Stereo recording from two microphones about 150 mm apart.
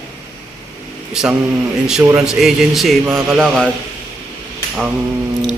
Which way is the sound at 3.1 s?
15° right (ahead or behind).